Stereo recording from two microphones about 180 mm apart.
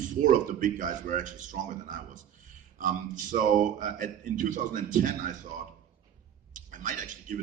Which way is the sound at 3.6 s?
45° right (ahead or behind).